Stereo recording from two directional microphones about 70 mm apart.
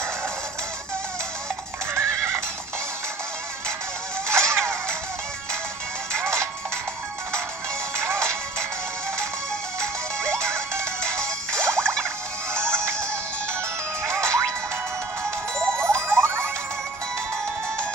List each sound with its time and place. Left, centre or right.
2.0 s horse: right
4.3 s a sound: right
6.1 s music: right
8.0 s music: right
10.3 s music: right
11.1 s music: centre
14.0 s music: right
15.7 s frog: right